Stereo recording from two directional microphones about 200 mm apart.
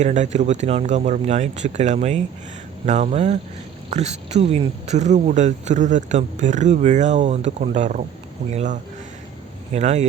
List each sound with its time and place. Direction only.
0.0 s speech: 35° right (ahead or behind)